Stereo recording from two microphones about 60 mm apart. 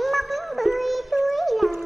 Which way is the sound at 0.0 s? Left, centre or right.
Centre.